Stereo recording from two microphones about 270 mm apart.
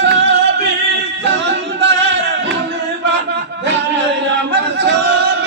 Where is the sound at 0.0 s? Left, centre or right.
Right.